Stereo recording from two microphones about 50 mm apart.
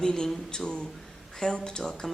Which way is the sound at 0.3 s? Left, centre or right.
Centre.